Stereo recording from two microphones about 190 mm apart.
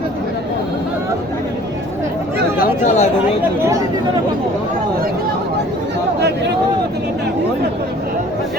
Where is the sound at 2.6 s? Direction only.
40° left (ahead or behind).